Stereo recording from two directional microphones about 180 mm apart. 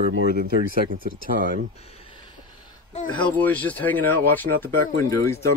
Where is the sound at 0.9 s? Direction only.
50° right (ahead or behind).